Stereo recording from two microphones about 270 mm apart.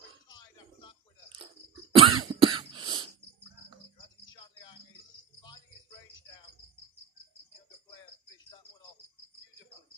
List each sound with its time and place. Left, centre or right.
0.3 s music: centre
1.9 s cough: centre